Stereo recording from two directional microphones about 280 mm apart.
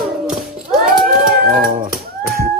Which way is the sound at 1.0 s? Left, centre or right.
Right.